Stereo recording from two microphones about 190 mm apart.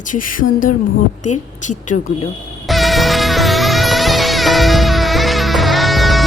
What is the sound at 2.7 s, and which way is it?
Music, centre (ahead or behind).